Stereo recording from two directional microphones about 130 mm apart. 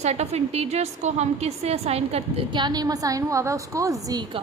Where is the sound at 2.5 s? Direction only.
35° right (ahead or behind).